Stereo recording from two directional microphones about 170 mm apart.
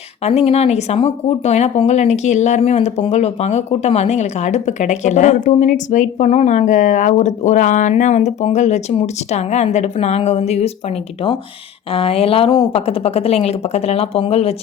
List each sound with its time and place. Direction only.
0.2 s speech: 35° left (ahead or behind)